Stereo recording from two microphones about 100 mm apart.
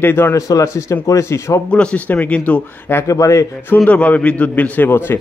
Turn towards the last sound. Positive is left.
turn(degrees=20)  # may be behind; listen again after turning